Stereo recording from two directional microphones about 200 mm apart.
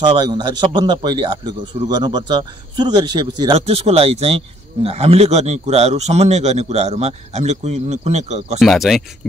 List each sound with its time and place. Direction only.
0.2 s a man's voice: 20° right (ahead or behind)
8.5 s speech: centre (ahead or behind)